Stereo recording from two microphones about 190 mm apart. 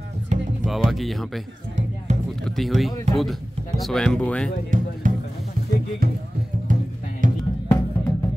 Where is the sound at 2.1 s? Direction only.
35° right (ahead or behind).